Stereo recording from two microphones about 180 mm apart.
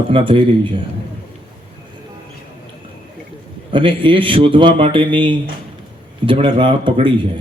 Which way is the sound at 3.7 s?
30° right (ahead or behind).